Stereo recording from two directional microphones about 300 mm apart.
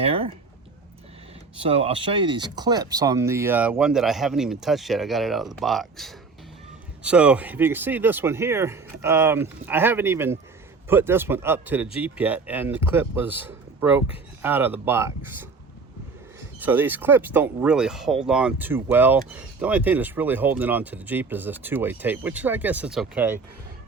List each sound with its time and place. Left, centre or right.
0.0 s a sound: centre
1.6 s speech: centre
16.6 s speech: centre